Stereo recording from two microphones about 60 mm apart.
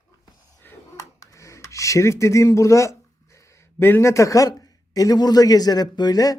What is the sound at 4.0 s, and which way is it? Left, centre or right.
A man's voice, left.